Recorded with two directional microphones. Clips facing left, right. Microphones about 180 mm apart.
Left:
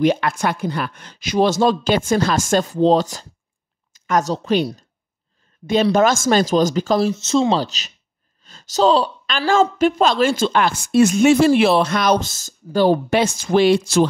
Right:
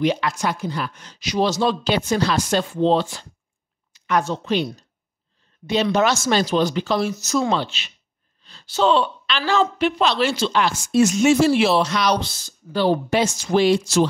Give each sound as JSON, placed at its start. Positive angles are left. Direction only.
{"t": 0.0, "sound": "a woman's voice", "side_deg": 50}
{"t": 5.9, "sound": "a woman's voice", "side_deg": 45}
{"t": 7.1, "sound": "speech", "side_deg": 25}
{"t": 7.6, "sound": "a woman's voice", "side_deg": 40}